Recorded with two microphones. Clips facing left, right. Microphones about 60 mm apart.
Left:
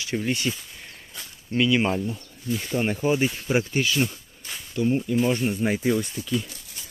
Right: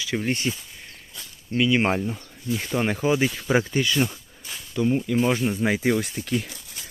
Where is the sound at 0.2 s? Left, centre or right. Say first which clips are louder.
Even; right.